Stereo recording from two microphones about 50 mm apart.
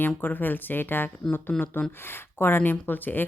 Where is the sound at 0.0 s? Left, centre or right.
Left.